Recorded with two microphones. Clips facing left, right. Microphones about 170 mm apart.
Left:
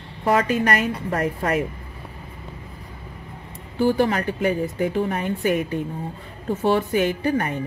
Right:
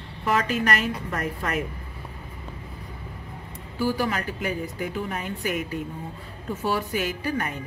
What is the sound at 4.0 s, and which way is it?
Speech, 35° left (ahead or behind).